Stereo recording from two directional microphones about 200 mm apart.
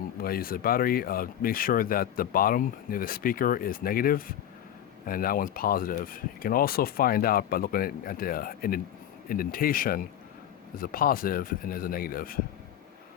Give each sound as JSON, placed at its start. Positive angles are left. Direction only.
{"t": 0.2, "sound": "speech", "side_deg": 50}